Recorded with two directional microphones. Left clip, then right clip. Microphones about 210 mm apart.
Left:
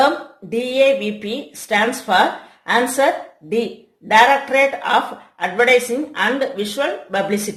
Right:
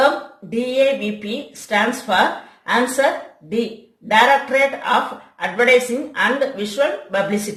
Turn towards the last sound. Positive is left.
turn(degrees=50)  # may be behind; listen again after turning